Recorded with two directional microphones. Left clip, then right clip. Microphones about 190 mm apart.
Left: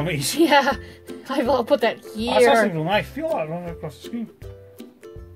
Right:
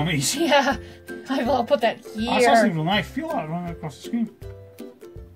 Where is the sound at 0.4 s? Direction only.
40° left (ahead or behind).